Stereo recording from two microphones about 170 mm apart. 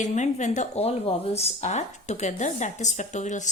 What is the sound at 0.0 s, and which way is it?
Speech, 45° left (ahead or behind).